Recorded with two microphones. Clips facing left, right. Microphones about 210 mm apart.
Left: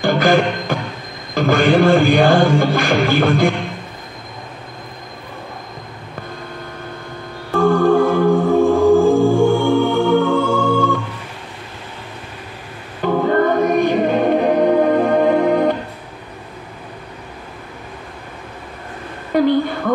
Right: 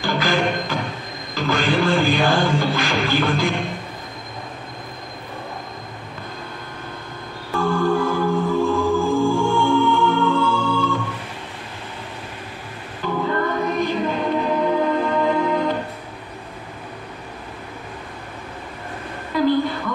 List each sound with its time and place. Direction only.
0.0 s music: 55° left (ahead or behind)
7.5 s music: 55° left (ahead or behind)
13.0 s music: 55° left (ahead or behind)
19.3 s a sound: 55° left (ahead or behind)